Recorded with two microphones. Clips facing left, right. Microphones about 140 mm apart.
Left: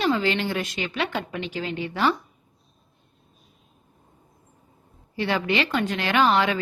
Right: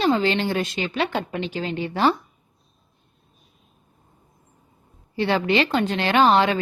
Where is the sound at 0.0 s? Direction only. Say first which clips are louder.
Right 3 dB; 30° right (ahead or behind).